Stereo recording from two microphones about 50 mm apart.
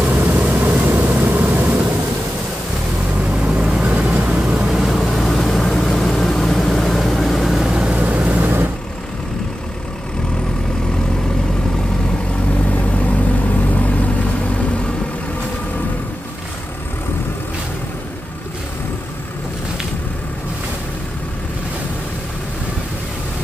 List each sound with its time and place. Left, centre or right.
0.1 s vehicle: right
3.3 s vehicle: centre
4.6 s vehicle: centre
4.9 s vehicle: centre
7.7 s vehicle: centre
8.0 s vehicle: right
12.8 s vehicle: left